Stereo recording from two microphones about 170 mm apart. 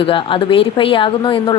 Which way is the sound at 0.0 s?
30° left (ahead or behind).